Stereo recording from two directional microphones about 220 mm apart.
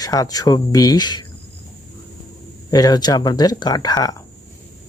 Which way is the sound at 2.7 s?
20° left (ahead or behind).